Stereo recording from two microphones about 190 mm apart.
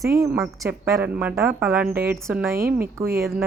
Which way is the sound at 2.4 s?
15° right (ahead or behind).